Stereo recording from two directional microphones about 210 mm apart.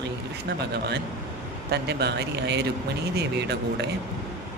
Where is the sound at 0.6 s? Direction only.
50° right (ahead or behind).